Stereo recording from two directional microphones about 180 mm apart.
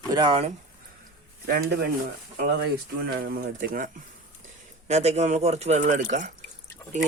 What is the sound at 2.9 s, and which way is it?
Speech, 60° right (ahead or behind).